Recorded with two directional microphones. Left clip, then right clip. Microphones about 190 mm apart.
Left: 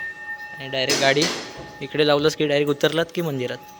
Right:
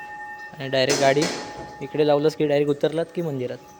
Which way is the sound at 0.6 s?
30° right (ahead or behind).